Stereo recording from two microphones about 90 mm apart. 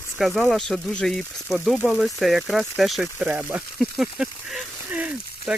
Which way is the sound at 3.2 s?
10° right (ahead or behind).